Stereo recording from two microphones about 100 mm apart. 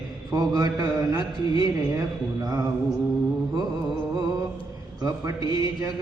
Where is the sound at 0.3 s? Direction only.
35° right (ahead or behind).